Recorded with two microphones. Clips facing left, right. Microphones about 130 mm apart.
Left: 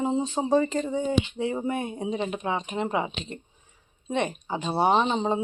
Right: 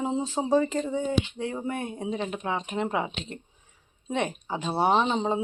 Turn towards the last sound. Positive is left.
turn(degrees=0)  # may be behind; listen again after turning